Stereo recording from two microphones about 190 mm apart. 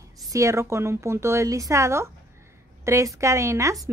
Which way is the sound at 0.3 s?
15° right (ahead or behind).